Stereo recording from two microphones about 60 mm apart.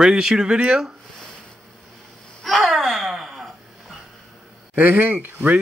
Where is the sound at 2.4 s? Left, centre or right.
Centre.